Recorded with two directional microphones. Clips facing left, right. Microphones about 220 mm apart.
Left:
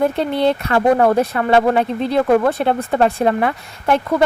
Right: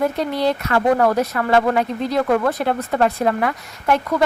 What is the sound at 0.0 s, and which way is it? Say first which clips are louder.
Speech: left 3 dB; 25° left (ahead or behind).